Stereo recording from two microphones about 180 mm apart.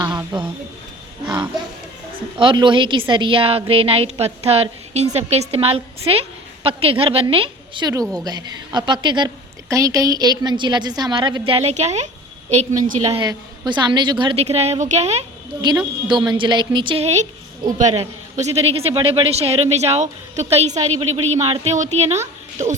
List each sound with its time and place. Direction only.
0.0 s a sound: 20° right (ahead or behind)
2.4 s a woman's voice: 25° right (ahead or behind)
13.2 s a woman's voice: 25° right (ahead or behind)
16.3 s a woman's voice: 25° right (ahead or behind)